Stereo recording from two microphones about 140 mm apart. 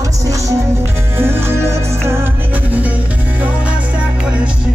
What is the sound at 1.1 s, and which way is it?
Music, 15° right (ahead or behind).